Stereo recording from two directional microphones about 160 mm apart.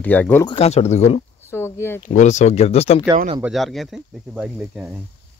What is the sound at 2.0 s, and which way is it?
Speech, 50° left (ahead or behind).